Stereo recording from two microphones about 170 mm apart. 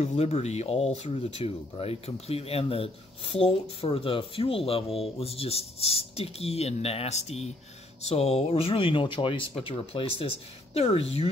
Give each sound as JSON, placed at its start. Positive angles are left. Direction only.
{"t": 0.0, "sound": "speech", "side_deg": 40}